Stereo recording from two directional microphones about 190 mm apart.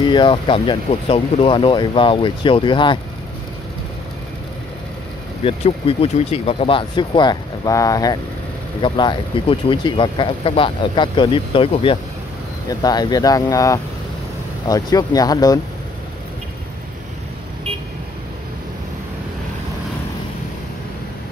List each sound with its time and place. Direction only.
0.0 s speech: 25° left (ahead or behind)
5.4 s speech: 30° left (ahead or behind)